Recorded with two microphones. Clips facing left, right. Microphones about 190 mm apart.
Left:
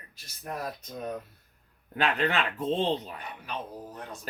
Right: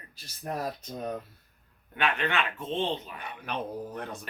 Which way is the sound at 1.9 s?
35° left (ahead or behind).